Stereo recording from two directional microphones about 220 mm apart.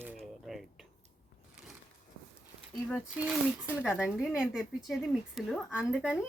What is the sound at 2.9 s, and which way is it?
Speech, centre (ahead or behind).